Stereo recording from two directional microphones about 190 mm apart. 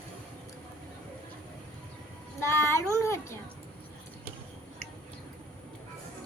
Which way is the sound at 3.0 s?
15° left (ahead or behind).